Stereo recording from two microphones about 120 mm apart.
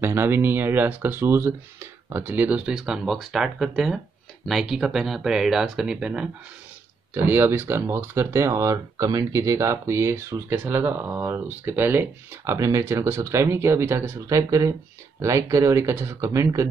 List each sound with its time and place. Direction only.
0.0 s speech: 20° right (ahead or behind)
7.2 s speech: 20° right (ahead or behind)